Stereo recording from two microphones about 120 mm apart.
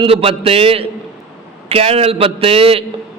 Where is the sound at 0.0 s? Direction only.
55° right (ahead or behind).